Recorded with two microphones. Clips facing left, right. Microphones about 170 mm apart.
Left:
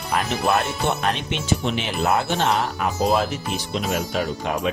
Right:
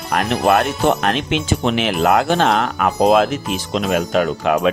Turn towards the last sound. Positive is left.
turn(degrees=-65)  # may be behind; listen again after turning